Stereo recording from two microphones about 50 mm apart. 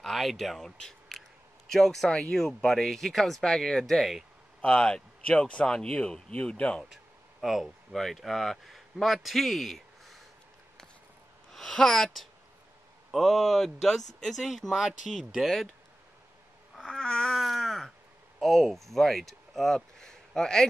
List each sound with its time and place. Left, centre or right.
0.0 s speech: centre
4.6 s speech: left
6.9 s speech: centre
11.5 s speech: centre
16.9 s baby cry: centre
18.4 s speech: centre